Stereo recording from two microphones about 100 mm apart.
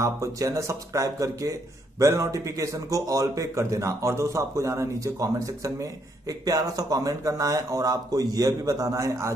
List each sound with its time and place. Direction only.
0.0 s speech: 30° right (ahead or behind)